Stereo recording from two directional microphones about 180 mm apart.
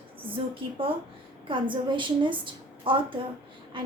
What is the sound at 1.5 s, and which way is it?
A woman's voice, 25° right (ahead or behind).